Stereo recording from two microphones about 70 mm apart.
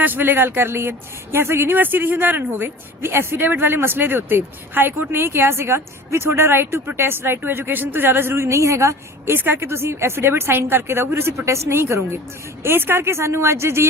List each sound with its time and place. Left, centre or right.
0.0 s speech: right